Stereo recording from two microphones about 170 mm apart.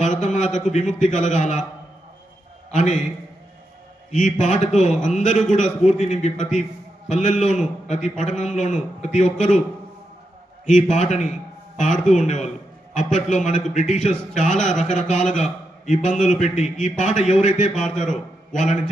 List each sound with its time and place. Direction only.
0.0 s a man's voice: 45° left (ahead or behind)
2.7 s a man's voice: 45° left (ahead or behind)
4.1 s a man's voice: 45° left (ahead or behind)
10.7 s a man's voice: 45° left (ahead or behind)